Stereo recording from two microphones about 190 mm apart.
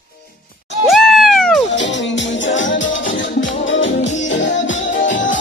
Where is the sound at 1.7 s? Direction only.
70° left (ahead or behind).